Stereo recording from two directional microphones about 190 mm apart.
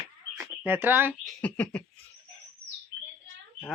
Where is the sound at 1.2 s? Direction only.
5° left (ahead or behind).